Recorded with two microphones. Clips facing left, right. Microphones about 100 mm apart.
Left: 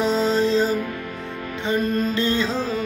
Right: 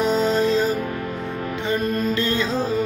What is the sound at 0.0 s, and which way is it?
Music, 25° left (ahead or behind).